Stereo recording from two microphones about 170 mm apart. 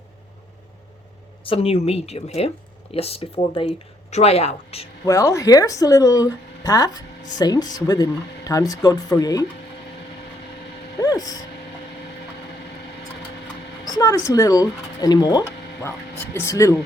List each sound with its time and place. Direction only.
1.5 s speech: 35° left (ahead or behind)
5.0 s speech: 15° left (ahead or behind)
11.0 s speech: 20° left (ahead or behind)
13.8 s a sound: 20° left (ahead or behind)
14.3 s speech: 20° left (ahead or behind)